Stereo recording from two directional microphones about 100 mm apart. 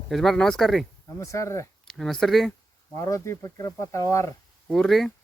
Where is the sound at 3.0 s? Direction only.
35° left (ahead or behind).